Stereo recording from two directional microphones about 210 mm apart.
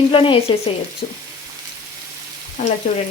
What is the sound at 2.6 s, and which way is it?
Speech, 30° left (ahead or behind).